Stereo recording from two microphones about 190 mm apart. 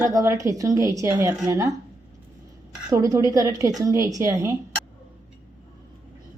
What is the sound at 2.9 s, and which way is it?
A woman's voice, 15° right (ahead or behind).